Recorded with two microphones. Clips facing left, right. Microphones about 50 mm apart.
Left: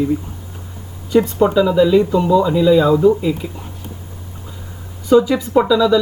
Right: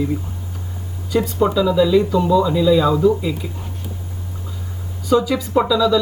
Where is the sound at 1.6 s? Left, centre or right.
Left.